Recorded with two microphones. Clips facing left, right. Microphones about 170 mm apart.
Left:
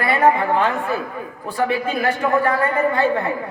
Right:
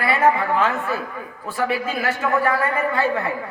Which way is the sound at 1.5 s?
20° left (ahead or behind).